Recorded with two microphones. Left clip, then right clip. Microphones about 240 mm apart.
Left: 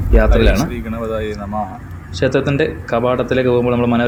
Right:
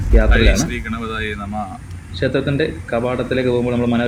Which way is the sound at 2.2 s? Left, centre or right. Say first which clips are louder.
Left 3 dB; centre.